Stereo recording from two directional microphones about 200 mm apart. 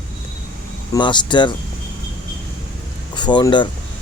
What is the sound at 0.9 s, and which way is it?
Speech, 25° left (ahead or behind).